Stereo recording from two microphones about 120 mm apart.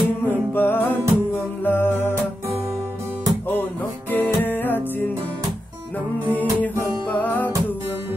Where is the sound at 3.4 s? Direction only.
15° left (ahead or behind).